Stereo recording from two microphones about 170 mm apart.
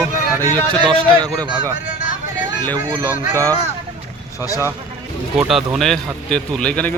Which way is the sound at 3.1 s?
20° right (ahead or behind).